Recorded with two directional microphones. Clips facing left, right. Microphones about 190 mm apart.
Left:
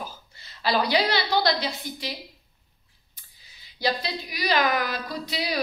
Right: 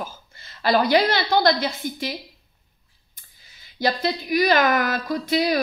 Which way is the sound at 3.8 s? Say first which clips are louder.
Right 4 dB; 50° right (ahead or behind).